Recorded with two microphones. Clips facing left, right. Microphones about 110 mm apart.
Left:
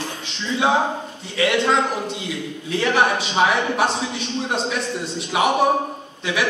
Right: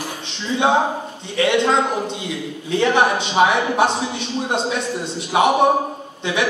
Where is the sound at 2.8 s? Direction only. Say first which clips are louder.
Right 2 dB; 25° right (ahead or behind).